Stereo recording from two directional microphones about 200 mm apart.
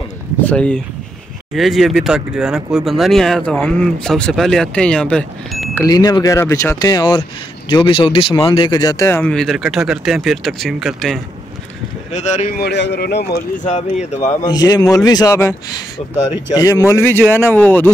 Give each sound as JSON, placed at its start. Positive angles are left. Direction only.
{"t": 0.5, "sound": "speech", "side_deg": 5}
{"t": 5.9, "sound": "speech", "side_deg": 20}
{"t": 12.1, "sound": "speech", "side_deg": 35}
{"t": 12.5, "sound": "speech", "side_deg": 60}
{"t": 13.7, "sound": "speech", "side_deg": 35}
{"t": 14.4, "sound": "speech", "side_deg": 20}
{"t": 16.5, "sound": "speech", "side_deg": 15}